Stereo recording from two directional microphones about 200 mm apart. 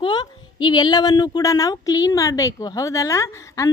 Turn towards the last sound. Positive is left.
turn(degrees=15)  # may be behind; listen again after turning